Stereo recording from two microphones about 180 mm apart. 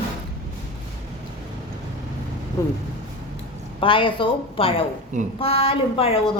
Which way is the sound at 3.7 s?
30° left (ahead or behind).